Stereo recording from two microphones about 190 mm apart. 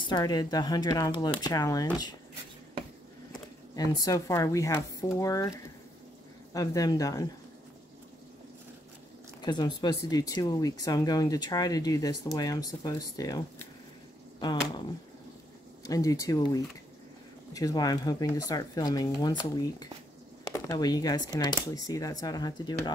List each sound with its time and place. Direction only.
0.0 s speech: 20° left (ahead or behind)
3.7 s speech: 20° left (ahead or behind)
6.5 s speech: 20° left (ahead or behind)
9.4 s speech: 20° left (ahead or behind)
15.8 s speech: 15° left (ahead or behind)